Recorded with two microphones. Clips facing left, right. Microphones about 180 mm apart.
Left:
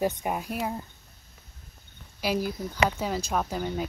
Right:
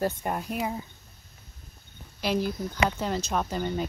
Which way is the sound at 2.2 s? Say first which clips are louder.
Right 1 dB; 10° left (ahead or behind).